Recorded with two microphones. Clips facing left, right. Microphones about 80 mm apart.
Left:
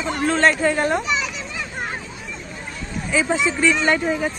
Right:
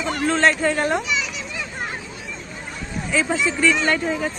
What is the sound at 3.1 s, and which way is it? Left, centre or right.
Speech, centre.